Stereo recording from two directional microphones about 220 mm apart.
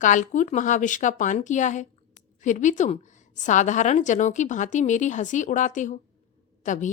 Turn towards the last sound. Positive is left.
turn(degrees=35)  # may be behind; listen again after turning